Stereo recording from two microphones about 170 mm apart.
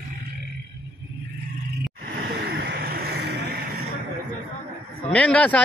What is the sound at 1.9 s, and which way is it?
Vehicle, 65° right (ahead or behind).